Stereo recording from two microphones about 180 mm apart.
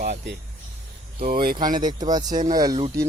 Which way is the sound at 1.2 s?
55° right (ahead or behind).